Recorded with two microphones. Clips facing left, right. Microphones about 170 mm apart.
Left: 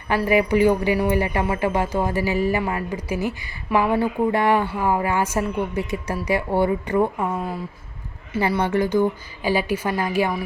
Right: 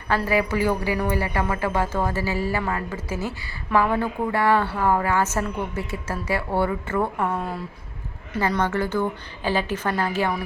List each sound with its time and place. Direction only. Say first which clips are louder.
0.3 s speech: left 7 dB; 20° left (ahead or behind)